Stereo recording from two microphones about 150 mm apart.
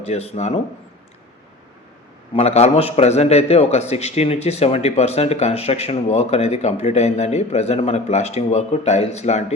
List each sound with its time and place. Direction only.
0.0 s a man's voice: 45° left (ahead or behind)
2.3 s a man's voice: 45° left (ahead or behind)